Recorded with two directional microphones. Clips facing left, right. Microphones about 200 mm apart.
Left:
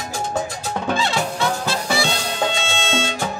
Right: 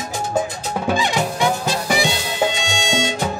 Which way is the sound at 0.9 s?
15° right (ahead or behind).